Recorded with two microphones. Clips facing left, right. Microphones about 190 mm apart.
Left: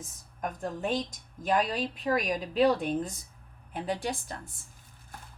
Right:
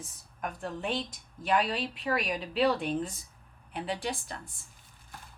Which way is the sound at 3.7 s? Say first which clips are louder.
Left 2 dB; 45° left (ahead or behind).